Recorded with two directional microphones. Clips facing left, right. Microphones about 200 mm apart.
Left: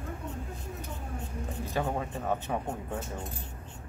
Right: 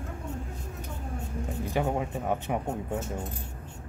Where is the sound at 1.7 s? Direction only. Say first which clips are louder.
Right 3 dB; 15° right (ahead or behind).